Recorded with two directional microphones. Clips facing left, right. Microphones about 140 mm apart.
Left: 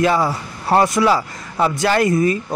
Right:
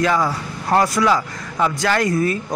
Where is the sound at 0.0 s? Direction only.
25° left (ahead or behind).